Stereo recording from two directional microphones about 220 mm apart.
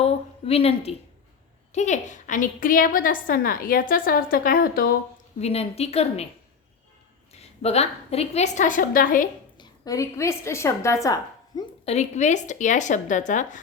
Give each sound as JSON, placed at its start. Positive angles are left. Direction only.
{"t": 0.0, "sound": "a woman's voice", "side_deg": 25}
{"t": 5.4, "sound": "a woman's voice", "side_deg": 30}
{"t": 7.3, "sound": "a woman's voice", "side_deg": 30}
{"t": 9.6, "sound": "a woman's voice", "side_deg": 15}
{"t": 11.9, "sound": "a woman's voice", "side_deg": 30}